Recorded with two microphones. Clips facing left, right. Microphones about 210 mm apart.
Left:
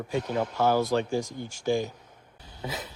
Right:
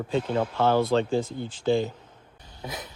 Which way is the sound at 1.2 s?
15° left (ahead or behind).